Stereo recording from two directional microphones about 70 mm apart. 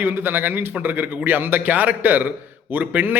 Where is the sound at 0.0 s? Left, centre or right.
Right.